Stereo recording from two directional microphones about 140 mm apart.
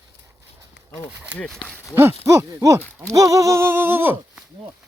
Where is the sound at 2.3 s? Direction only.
20° right (ahead or behind).